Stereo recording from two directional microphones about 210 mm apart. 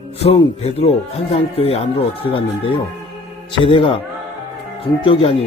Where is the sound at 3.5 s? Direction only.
25° left (ahead or behind).